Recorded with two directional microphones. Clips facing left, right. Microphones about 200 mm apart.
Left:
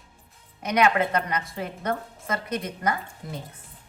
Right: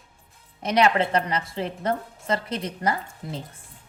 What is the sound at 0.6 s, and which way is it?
A woman's voice, 30° right (ahead or behind).